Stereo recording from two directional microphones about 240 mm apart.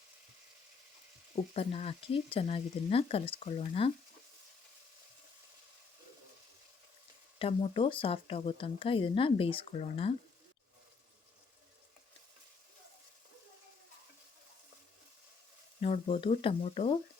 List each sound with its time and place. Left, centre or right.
1.5 s speech: left
7.3 s speech: left
15.8 s speech: left